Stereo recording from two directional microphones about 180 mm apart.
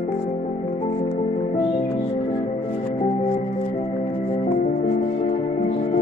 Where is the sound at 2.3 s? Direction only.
25° left (ahead or behind).